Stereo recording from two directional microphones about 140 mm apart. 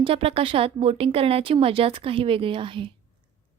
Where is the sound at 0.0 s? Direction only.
45° right (ahead or behind).